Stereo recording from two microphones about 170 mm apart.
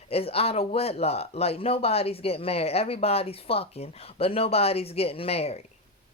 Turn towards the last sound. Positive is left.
turn(degrees=35)  # may be behind; listen again after turning